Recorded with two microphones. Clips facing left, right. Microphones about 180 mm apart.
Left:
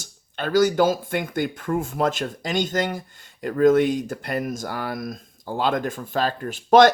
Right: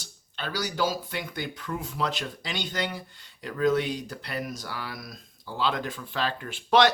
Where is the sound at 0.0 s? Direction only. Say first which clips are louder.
Left 8 dB; 50° left (ahead or behind).